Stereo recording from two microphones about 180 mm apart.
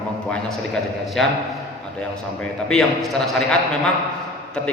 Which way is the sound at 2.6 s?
Centre (ahead or behind).